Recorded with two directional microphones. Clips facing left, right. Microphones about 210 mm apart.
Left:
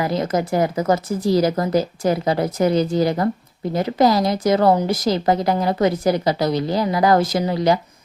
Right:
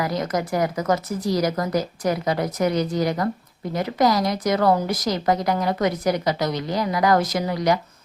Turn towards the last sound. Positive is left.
turn(degrees=30)  # may be behind; listen again after turning